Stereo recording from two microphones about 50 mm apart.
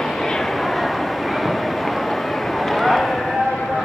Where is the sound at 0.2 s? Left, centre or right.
Centre.